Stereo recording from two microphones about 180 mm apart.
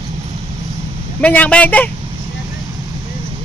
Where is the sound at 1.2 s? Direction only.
10° left (ahead or behind).